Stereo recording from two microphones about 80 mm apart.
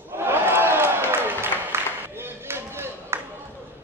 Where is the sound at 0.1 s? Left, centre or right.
Right.